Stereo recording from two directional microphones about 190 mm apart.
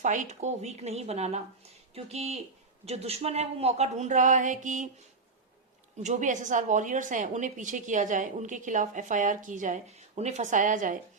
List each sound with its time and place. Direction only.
0.0 s a woman's voice: 40° right (ahead or behind)
6.0 s a woman's voice: 40° right (ahead or behind)